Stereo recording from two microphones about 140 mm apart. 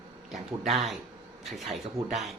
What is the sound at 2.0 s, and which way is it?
Speech, 50° right (ahead or behind).